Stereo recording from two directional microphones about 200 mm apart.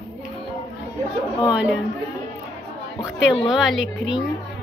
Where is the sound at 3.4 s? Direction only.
Centre (ahead or behind).